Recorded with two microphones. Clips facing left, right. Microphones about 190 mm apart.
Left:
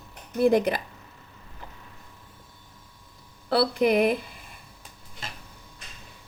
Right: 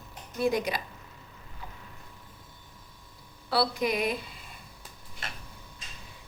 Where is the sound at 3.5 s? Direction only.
55° left (ahead or behind).